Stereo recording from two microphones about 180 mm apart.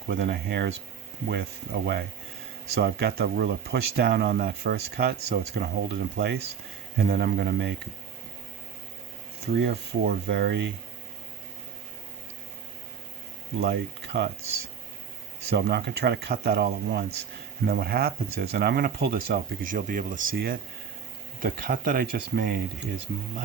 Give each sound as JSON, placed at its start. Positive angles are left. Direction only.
{"t": 0.1, "sound": "speech", "side_deg": -60}
{"t": 9.5, "sound": "speech", "side_deg": -60}
{"t": 13.6, "sound": "speech", "side_deg": -60}
{"t": 15.4, "sound": "speech", "side_deg": -65}